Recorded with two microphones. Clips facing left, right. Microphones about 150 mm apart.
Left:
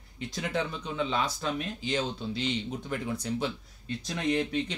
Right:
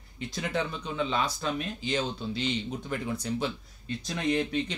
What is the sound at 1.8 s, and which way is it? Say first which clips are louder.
Speech: even; 15° left (ahead or behind).